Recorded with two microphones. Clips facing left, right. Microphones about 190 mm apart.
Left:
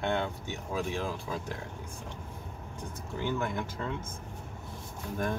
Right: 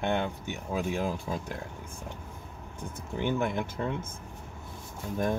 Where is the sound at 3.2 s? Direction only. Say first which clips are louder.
Right 3 dB; 25° right (ahead or behind).